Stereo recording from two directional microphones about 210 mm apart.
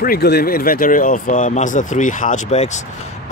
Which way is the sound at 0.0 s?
45° left (ahead or behind).